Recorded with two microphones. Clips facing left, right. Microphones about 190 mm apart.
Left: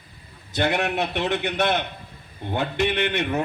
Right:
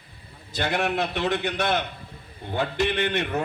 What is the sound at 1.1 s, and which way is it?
A man's voice, 60° left (ahead or behind).